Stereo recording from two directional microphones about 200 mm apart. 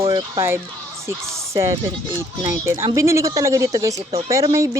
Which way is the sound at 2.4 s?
15° right (ahead or behind).